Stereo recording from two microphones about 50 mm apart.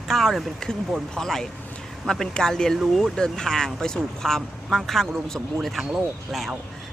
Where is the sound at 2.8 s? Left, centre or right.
Centre.